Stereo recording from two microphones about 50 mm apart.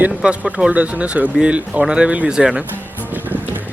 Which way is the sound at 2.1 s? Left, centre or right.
Right.